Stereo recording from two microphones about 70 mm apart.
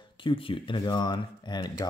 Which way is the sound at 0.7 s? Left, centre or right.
Left.